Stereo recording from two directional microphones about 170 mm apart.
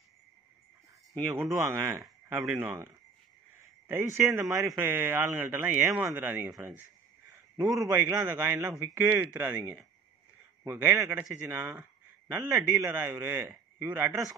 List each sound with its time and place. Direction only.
1.3 s a man's voice: 15° right (ahead or behind)
4.2 s speech: centre (ahead or behind)
4.8 s a man's voice: 10° right (ahead or behind)